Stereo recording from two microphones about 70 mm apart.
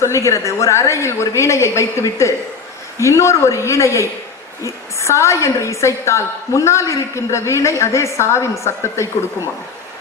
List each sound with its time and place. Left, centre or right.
0.0 s a woman's voice: left